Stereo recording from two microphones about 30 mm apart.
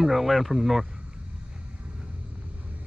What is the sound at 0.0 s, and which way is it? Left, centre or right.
Speech, centre.